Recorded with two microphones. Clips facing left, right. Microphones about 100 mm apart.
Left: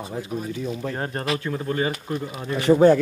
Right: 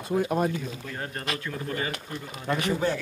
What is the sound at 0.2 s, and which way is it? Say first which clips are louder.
Speech: right 6 dB; 65° right (ahead or behind).